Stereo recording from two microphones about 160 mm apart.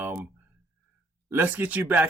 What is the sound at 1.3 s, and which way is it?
Speech, 10° right (ahead or behind).